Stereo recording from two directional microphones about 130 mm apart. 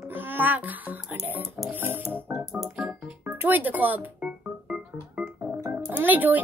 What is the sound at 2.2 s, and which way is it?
Music, 15° right (ahead or behind).